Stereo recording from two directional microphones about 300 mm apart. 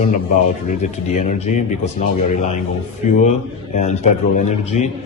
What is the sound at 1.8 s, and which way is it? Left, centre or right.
Speech, left.